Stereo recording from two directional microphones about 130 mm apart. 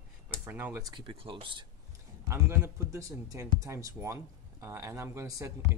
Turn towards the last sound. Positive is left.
turn(degrees=-25)  # may be behind; listen again after turning